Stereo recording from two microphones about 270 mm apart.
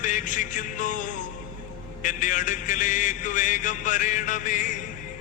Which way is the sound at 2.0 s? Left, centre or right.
Left.